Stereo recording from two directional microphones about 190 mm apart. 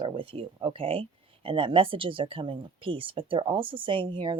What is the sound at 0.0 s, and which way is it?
Speech, 30° right (ahead or behind).